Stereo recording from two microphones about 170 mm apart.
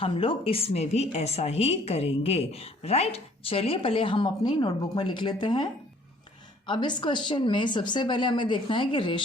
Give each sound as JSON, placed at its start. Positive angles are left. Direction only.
{"t": 0.0, "sound": "a woman's voice", "side_deg": 30}
{"t": 6.7, "sound": "speech", "side_deg": 25}